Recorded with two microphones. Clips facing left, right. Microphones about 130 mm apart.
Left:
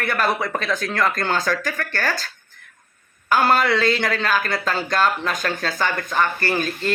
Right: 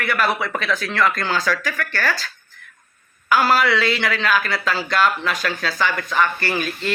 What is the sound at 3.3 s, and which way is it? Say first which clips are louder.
A woman's voice: even; 50° left (ahead or behind).